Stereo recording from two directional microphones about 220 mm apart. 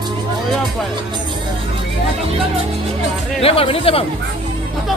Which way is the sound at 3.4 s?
25° left (ahead or behind).